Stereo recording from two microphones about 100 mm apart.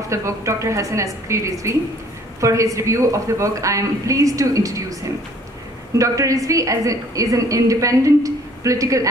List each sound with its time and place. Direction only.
0.1 s a woman's voice: 30° right (ahead or behind)
5.9 s a woman's voice: 35° right (ahead or behind)